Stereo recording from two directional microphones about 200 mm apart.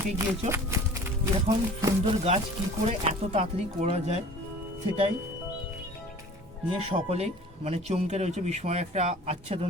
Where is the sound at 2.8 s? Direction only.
30° right (ahead or behind).